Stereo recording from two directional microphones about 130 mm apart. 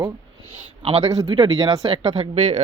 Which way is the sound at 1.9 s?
50° right (ahead or behind).